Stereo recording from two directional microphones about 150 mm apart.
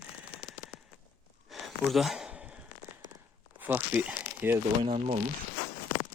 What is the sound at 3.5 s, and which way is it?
Speech, 10° right (ahead or behind).